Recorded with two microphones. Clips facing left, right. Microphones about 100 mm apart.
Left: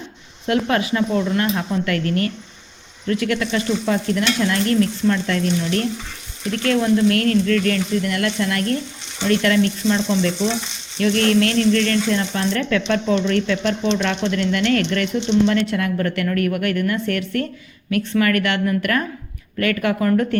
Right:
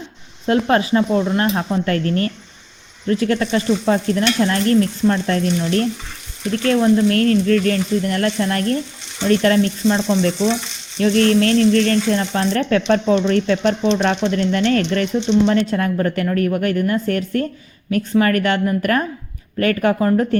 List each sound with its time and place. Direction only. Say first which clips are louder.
0.4 s speech: right 3 dB; 30° right (ahead or behind)